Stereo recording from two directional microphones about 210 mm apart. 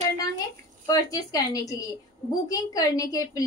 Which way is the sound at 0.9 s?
15° left (ahead or behind).